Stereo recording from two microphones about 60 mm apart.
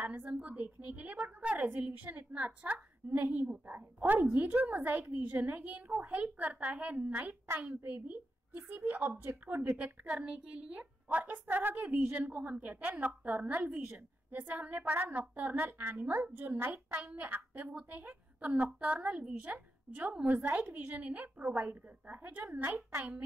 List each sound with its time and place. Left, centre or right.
0.0 s a woman's voice: right
0.4 s a sound: right
1.5 s a woman's voice: right
10.0 s a woman's voice: centre
13.6 s a woman's voice: centre
14.3 s a woman's voice: right